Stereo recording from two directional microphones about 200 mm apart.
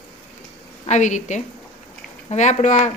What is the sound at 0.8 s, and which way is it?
A woman's voice, 35° left (ahead or behind).